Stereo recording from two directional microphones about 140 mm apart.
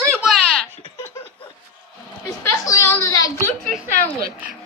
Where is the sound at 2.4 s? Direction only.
20° left (ahead or behind).